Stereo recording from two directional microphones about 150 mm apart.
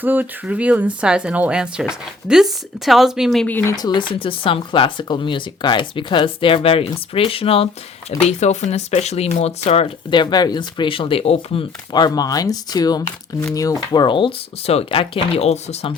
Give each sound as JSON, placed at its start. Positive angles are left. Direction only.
{"t": 0.0, "sound": "speech", "side_deg": -10}
{"t": 11.9, "sound": "speech", "side_deg": 25}